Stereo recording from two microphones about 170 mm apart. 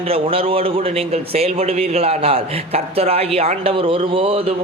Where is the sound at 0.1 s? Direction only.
35° right (ahead or behind).